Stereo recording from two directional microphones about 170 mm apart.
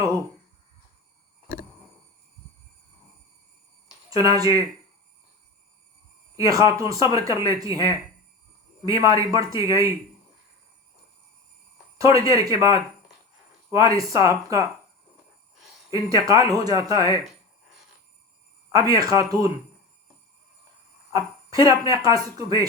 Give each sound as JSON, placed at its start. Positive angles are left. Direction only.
{"t": 4.1, "sound": "speech", "side_deg": -20}
{"t": 6.3, "sound": "speech", "side_deg": -20}
{"t": 11.9, "sound": "speech", "side_deg": -20}
{"t": 15.9, "sound": "speech", "side_deg": -20}
{"t": 18.7, "sound": "speech", "side_deg": -20}
{"t": 21.1, "sound": "speech", "side_deg": -20}